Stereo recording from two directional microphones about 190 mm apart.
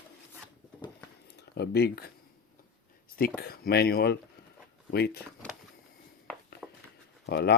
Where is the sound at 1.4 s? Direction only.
60° left (ahead or behind).